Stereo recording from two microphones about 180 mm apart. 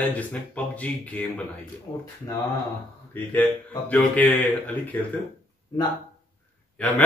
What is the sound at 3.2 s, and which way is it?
A man's voice, 10° left (ahead or behind).